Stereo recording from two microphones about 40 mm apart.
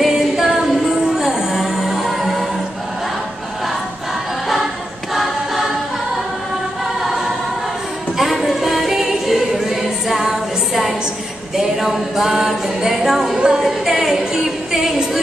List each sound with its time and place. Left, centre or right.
0.0 s music: centre
5.1 s choir: centre
8.2 s music: centre
10.7 s a sound: centre
11.5 s singing: centre
13.5 s music: centre